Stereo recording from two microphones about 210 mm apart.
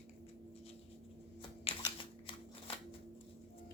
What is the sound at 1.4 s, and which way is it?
Shuffling cards, 25° left (ahead or behind).